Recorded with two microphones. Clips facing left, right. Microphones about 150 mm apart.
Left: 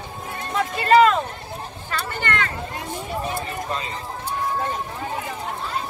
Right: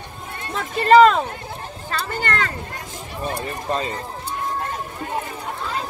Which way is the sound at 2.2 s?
35° right (ahead or behind).